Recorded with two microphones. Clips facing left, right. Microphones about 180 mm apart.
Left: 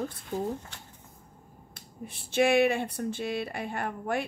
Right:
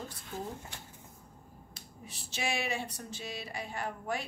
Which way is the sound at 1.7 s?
55° left (ahead or behind).